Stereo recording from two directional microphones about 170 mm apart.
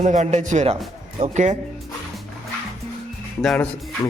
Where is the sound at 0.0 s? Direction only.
45° right (ahead or behind).